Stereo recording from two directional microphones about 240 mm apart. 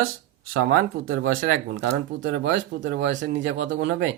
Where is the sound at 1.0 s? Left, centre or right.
Right.